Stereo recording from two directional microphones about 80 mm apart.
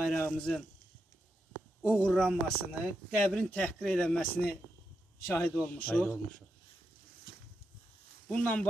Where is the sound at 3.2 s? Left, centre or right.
Centre.